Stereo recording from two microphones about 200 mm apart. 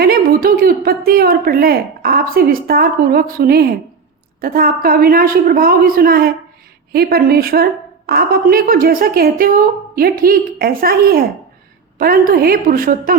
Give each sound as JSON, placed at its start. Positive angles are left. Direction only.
{"t": 0.0, "sound": "a woman's voice", "side_deg": -50}